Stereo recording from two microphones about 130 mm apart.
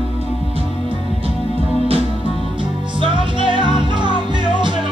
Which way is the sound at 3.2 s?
40° right (ahead or behind).